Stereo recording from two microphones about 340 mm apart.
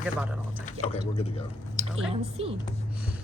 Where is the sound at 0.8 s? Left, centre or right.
Centre.